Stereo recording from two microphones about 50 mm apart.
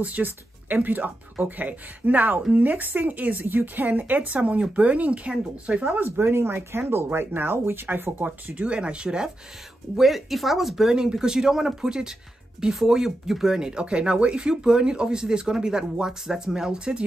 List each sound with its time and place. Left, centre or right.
0.0 s speech: right
6.0 s speech: right
8.7 s speech: centre
9.9 s speech: centre